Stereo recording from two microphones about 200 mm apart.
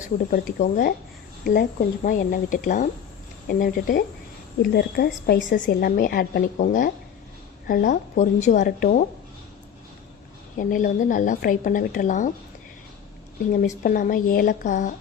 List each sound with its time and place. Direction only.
0.0 s a woman's voice: 45° left (ahead or behind)
10.6 s a woman's voice: 40° left (ahead or behind)
13.5 s a woman's voice: 40° left (ahead or behind)